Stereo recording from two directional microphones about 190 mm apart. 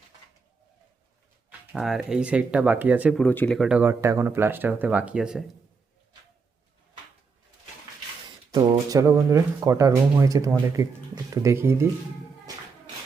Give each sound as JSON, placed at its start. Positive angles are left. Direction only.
{"t": 1.5, "sound": "speech", "side_deg": 0}
{"t": 3.2, "sound": "speech", "side_deg": 10}
{"t": 8.5, "sound": "speech", "side_deg": -20}